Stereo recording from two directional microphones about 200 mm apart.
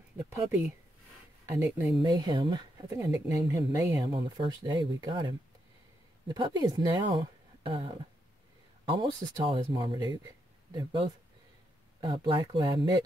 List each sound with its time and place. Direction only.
0.3 s a woman's voice: 10° right (ahead or behind)